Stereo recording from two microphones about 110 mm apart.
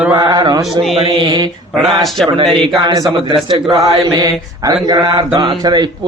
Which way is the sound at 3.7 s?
35° right (ahead or behind).